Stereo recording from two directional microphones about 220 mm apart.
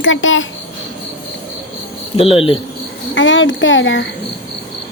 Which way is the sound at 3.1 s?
60° left (ahead or behind).